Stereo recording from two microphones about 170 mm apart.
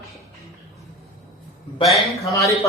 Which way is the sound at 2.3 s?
15° left (ahead or behind).